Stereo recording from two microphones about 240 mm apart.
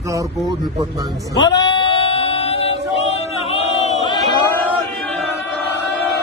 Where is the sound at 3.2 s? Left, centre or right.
Left.